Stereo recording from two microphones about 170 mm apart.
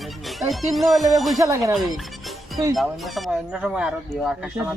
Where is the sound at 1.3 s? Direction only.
20° right (ahead or behind).